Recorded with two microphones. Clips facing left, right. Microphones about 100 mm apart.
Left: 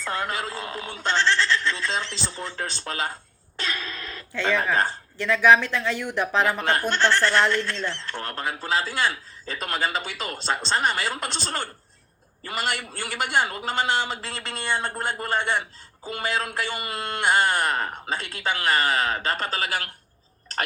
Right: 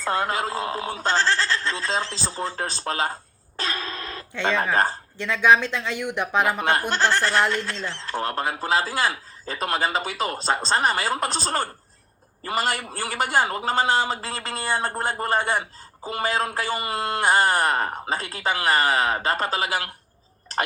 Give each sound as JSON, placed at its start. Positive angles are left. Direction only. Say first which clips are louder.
{"t": 0.0, "sound": "speech", "louder": "right 4 dB", "side_deg": -40}
{"t": 3.6, "sound": "a sound", "louder": "right 2 dB", "side_deg": -35}
{"t": 4.4, "sound": "speech", "louder": "right 1 dB", "side_deg": -20}
{"t": 7.5, "sound": "speech", "louder": "left 1 dB", "side_deg": -35}